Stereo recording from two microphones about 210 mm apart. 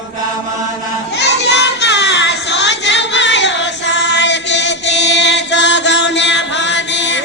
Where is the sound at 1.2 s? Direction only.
55° left (ahead or behind).